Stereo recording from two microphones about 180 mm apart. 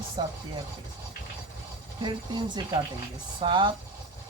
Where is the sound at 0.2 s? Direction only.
25° right (ahead or behind).